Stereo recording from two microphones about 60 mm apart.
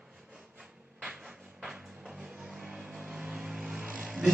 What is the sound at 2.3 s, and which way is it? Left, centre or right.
Vehicle, centre.